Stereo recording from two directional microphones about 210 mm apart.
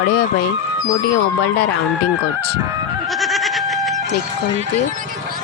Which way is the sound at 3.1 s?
Centre (ahead or behind).